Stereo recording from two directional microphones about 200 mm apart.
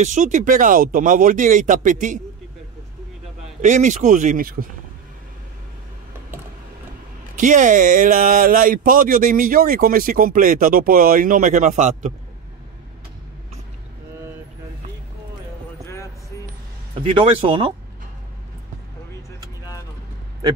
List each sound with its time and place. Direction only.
0.0 s speech: 40° right (ahead or behind)
3.6 s speech: 35° right (ahead or behind)
7.3 s speech: 40° right (ahead or behind)
17.2 s speech: 25° right (ahead or behind)